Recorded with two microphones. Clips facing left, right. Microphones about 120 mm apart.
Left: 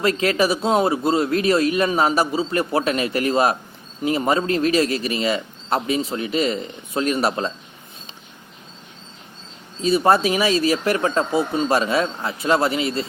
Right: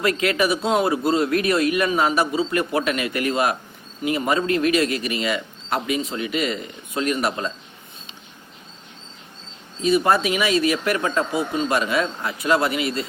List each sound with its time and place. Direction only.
0.0 s speech: 30° left (ahead or behind)
9.8 s speech: 30° left (ahead or behind)